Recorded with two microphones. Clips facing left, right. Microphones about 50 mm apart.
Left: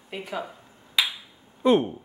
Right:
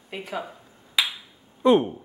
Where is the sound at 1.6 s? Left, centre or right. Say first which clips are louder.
Right 2 dB; centre.